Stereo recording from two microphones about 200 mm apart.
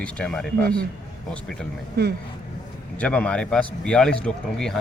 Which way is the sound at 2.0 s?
55° right (ahead or behind).